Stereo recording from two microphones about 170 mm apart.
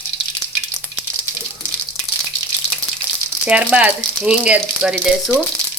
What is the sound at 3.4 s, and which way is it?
Speech, 5° right (ahead or behind).